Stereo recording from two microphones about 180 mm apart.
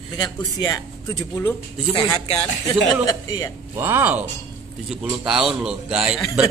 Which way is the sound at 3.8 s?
10° right (ahead or behind).